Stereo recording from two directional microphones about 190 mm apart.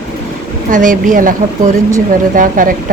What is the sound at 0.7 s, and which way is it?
Speech, 40° right (ahead or behind).